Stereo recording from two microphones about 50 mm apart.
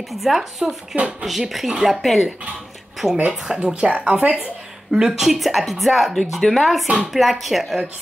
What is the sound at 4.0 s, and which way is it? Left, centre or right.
Speech, right.